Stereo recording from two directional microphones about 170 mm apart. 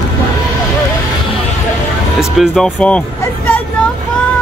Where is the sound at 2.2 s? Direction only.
Centre (ahead or behind).